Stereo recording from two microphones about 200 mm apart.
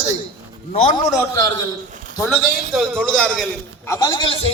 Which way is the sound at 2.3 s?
Centre (ahead or behind).